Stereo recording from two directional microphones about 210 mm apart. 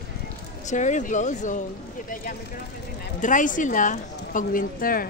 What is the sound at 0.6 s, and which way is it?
Speech, 35° left (ahead or behind).